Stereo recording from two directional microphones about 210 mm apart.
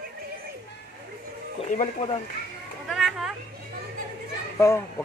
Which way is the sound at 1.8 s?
30° left (ahead or behind).